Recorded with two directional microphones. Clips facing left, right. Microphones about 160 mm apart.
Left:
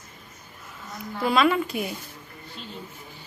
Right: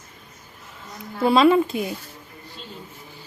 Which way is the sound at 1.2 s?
30° right (ahead or behind).